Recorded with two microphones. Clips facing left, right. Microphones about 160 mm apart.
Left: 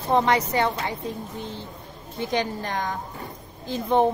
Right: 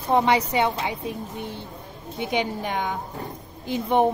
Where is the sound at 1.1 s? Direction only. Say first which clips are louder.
Right 1 dB; 60° right (ahead or behind).